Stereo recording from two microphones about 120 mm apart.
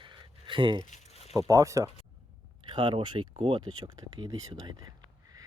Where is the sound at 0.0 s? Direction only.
40° right (ahead or behind).